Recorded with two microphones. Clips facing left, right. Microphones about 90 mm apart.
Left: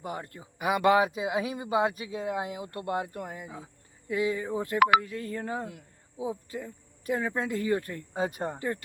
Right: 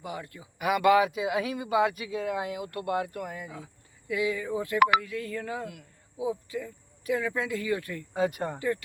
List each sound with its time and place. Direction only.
0.0 s speech: 40° left (ahead or behind)
0.6 s speech: 30° left (ahead or behind)